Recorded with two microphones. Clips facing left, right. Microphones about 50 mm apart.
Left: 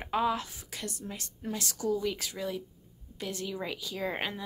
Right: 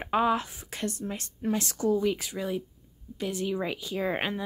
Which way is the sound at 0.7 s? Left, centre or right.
Right.